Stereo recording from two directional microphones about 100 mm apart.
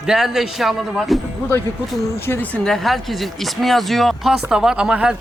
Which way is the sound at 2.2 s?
20° left (ahead or behind).